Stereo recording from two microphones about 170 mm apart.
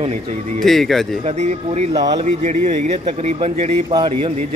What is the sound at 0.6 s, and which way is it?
Speech, centre (ahead or behind).